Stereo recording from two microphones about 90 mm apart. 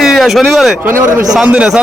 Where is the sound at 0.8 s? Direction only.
25° right (ahead or behind).